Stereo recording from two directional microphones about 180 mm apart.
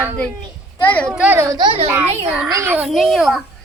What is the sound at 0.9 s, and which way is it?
Speech, 10° left (ahead or behind).